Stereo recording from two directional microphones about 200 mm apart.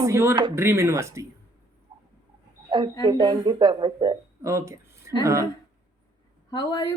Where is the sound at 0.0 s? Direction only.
15° right (ahead or behind).